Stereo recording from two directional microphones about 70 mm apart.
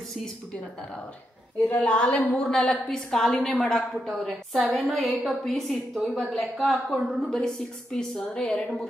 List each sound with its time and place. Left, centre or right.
1.8 s a woman's voice: centre
2.5 s a woman's voice: centre